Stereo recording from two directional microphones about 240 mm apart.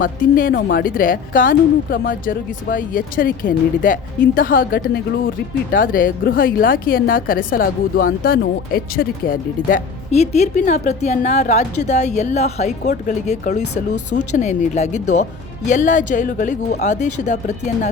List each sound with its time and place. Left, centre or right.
0.0 s a woman's voice: left